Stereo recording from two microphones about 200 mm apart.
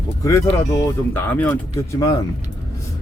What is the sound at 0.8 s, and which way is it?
Speech, 10° left (ahead or behind).